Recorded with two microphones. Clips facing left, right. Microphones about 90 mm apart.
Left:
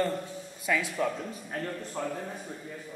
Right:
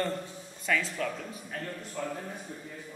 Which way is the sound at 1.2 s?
30° left (ahead or behind).